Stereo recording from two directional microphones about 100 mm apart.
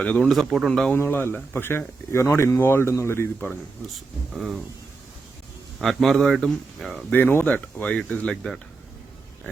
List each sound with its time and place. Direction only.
0.0 s speech: 15° left (ahead or behind)
0.3 s speech: centre (ahead or behind)
0.9 s speech: 25° left (ahead or behind)
4.3 s speech: 5° right (ahead or behind)
5.8 s speech: centre (ahead or behind)
7.1 s speech: 20° left (ahead or behind)